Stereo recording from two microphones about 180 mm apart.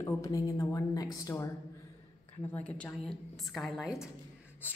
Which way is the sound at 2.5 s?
5° left (ahead or behind).